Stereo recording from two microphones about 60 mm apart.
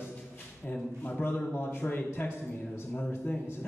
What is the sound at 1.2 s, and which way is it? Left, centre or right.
A man's voice, left.